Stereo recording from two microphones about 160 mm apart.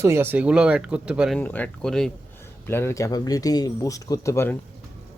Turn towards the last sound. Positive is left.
turn(degrees=15)  # may be behind; listen again after turning